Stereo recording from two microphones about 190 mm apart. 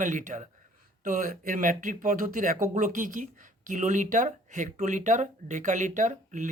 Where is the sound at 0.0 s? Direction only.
40° right (ahead or behind).